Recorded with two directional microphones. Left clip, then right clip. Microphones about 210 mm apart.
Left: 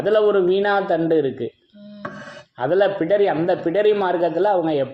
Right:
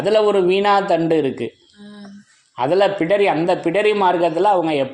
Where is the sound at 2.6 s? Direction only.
45° right (ahead or behind).